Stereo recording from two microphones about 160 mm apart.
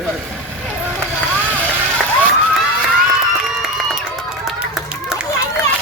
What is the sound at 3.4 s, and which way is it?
Run, centre (ahead or behind).